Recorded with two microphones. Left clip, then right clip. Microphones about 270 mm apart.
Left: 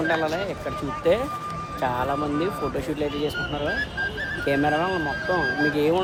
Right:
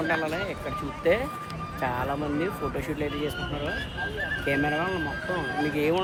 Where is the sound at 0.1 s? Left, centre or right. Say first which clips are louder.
Left 3 dB; centre.